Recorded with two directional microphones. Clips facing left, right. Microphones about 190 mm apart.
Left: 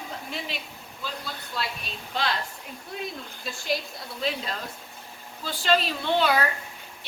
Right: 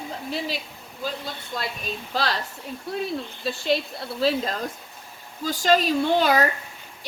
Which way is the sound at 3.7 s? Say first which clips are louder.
Right 5 dB; 30° right (ahead or behind).